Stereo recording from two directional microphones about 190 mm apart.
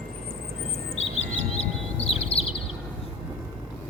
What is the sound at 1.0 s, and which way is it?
Bird, 35° left (ahead or behind).